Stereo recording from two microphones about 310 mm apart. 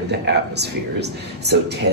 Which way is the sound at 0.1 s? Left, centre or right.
Right.